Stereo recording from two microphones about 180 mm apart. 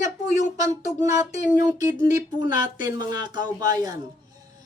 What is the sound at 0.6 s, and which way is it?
A woman's voice, 15° right (ahead or behind).